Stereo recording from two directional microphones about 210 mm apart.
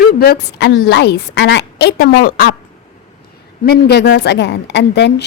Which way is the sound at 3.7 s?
55° left (ahead or behind).